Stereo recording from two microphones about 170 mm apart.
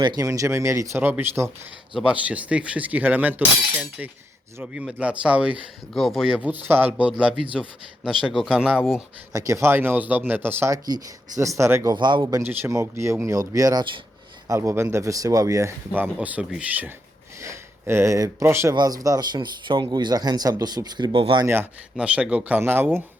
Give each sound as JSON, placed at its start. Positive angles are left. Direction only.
{"t": 0.0, "sound": "speech", "side_deg": -25}
{"t": 9.3, "sound": "speech", "side_deg": -15}
{"t": 11.9, "sound": "speech", "side_deg": -25}
{"t": 12.2, "sound": "speech", "side_deg": -15}
{"t": 21.4, "sound": "speech", "side_deg": -15}